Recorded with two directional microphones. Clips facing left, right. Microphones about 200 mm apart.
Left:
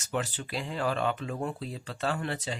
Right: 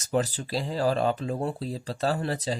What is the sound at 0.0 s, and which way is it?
Speech, 35° right (ahead or behind).